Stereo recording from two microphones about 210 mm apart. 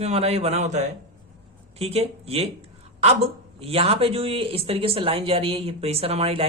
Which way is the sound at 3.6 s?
30° right (ahead or behind).